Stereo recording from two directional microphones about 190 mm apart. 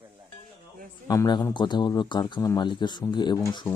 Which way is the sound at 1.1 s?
20° left (ahead or behind).